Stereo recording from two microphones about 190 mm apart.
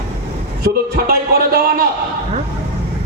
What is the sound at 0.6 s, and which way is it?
Speech, 55° right (ahead or behind).